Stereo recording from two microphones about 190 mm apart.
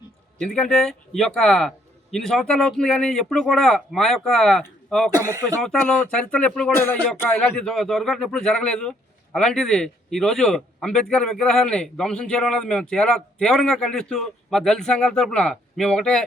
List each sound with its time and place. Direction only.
0.3 s speech: 5° left (ahead or behind)